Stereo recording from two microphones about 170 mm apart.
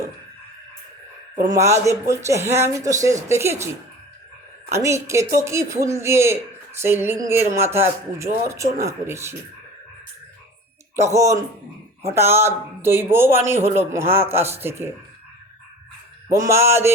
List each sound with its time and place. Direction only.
1.5 s speech: 15° right (ahead or behind)
4.7 s speech: 15° right (ahead or behind)
11.1 s speech: 20° right (ahead or behind)
16.3 s speech: 15° right (ahead or behind)